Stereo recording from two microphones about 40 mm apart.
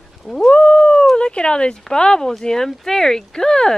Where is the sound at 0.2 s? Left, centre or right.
Centre.